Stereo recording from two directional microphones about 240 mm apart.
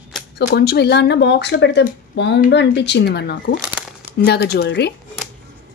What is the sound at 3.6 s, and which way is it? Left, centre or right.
Crumpling, centre.